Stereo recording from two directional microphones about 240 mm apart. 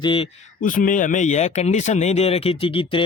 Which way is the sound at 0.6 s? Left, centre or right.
Left.